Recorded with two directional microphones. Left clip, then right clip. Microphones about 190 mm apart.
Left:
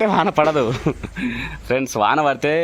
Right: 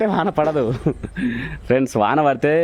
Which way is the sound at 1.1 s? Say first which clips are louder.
Even; 30° right (ahead or behind).